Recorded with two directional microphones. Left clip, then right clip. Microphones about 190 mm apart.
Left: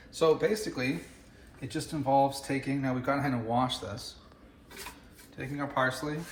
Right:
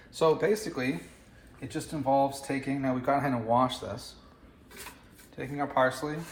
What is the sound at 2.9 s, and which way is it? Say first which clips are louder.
Speech: right 4 dB; 35° right (ahead or behind).